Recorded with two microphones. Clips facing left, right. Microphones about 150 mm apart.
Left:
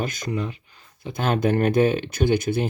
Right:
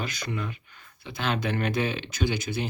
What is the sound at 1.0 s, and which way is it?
Speech, 45° left (ahead or behind).